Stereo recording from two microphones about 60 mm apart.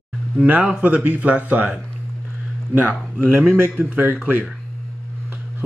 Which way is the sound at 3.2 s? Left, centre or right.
Right.